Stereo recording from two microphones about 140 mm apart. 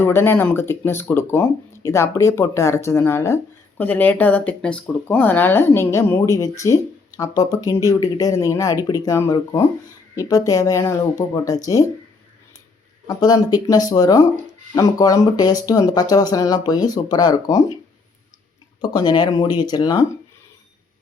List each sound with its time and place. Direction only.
0.0 s speech: 15° left (ahead or behind)
13.1 s speech: 25° left (ahead or behind)
18.8 s speech: 30° left (ahead or behind)